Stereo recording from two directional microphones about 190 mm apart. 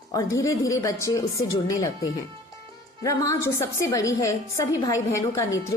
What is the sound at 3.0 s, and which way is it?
A woman's voice, 15° left (ahead or behind).